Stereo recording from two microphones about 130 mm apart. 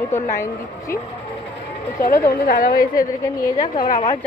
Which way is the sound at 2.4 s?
90° left.